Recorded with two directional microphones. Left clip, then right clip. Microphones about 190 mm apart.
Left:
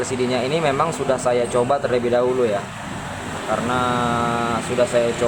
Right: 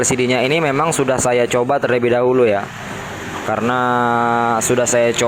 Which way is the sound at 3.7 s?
45° right (ahead or behind).